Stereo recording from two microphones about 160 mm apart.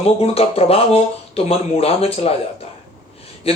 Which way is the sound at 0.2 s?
40° left (ahead or behind).